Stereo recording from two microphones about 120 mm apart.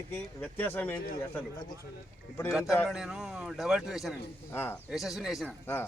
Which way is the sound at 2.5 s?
5° right (ahead or behind).